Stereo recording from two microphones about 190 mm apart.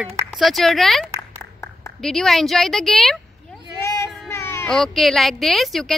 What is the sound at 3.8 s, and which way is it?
Child singing, 15° left (ahead or behind).